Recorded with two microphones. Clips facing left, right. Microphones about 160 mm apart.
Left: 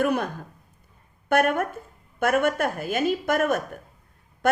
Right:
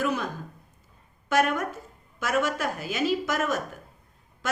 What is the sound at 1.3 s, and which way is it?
Speech, 55° left (ahead or behind).